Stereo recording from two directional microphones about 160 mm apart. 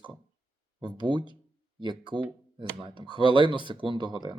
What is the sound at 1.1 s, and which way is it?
Speech, 30° left (ahead or behind).